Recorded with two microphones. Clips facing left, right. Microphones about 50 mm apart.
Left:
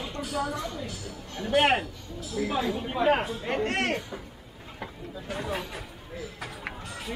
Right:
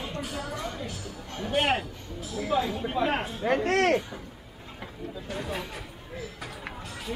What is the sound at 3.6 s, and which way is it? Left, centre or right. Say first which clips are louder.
Speech: right 7 dB; right.